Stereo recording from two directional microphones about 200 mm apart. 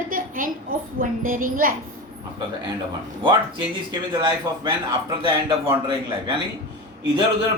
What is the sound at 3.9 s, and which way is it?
Speech, 20° right (ahead or behind).